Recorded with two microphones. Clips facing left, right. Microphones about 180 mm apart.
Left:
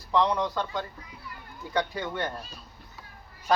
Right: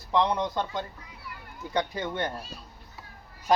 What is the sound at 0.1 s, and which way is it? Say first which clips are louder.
A child's voice: even; 20° right (ahead or behind).